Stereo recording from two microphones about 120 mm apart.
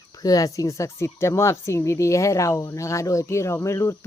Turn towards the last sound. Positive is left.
turn(degrees=20)  # may be behind; listen again after turning